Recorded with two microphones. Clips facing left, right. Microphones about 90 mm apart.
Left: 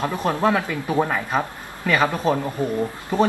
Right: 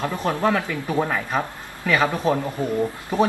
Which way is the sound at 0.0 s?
20° left (ahead or behind).